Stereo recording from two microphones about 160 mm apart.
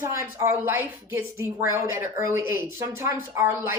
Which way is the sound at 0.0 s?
20° right (ahead or behind).